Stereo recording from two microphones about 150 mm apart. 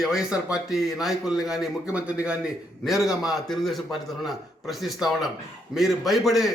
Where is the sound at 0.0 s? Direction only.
5° right (ahead or behind).